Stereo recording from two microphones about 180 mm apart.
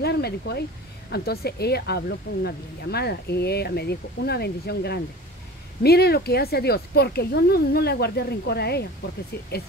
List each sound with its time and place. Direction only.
0.0 s speech: 60° left (ahead or behind)